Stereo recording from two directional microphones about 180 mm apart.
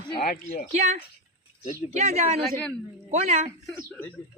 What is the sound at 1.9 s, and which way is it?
Speech, 35° right (ahead or behind).